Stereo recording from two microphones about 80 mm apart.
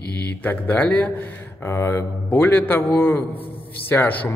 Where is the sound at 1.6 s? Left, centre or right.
Left.